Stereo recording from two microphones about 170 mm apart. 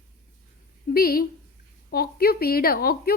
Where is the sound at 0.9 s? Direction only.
60° left (ahead or behind).